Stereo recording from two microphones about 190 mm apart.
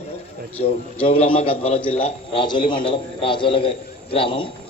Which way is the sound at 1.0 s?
30° left (ahead or behind).